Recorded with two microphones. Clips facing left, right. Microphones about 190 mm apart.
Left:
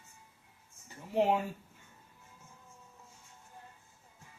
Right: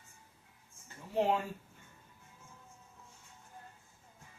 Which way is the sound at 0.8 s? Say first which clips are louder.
Left 2 dB; 15° left (ahead or behind).